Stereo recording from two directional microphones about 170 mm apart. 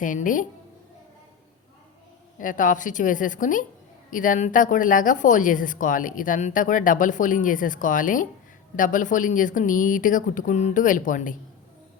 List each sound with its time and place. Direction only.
0.0 s speech: 50° left (ahead or behind)
2.4 s speech: 50° left (ahead or behind)